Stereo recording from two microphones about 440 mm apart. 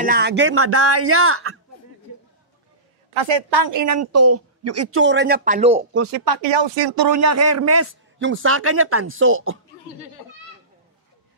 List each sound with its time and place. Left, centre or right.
0.0 s speech: right
3.1 s a woman's voice: right
3.7 s speech: right; by 5.9 s centre
6.2 s speech: right
6.5 s speech: right